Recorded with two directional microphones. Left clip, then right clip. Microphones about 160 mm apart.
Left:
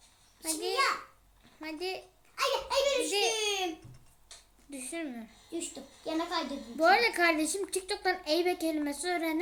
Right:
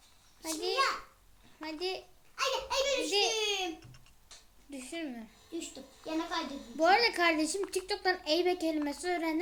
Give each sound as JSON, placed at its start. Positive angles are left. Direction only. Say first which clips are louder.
{"t": 0.4, "sound": "a child's voice", "louder": "left 1 dB", "side_deg": 0}
{"t": 2.3, "sound": "a sound", "louder": "left 3 dB", "side_deg": 15}
{"t": 3.3, "sound": "baby laughter", "louder": "left 1 dB", "side_deg": 15}
{"t": 4.7, "sound": "a woman's voice", "louder": "left 1 dB", "side_deg": 0}
{"t": 5.5, "sound": "a child's voice", "louder": "left 2 dB", "side_deg": 15}
{"t": 6.7, "sound": "a woman's voice", "louder": "left 1 dB", "side_deg": 0}